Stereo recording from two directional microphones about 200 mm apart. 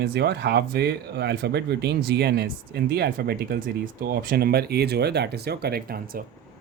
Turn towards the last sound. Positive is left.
turn(degrees=-45)  # may be behind; listen again after turning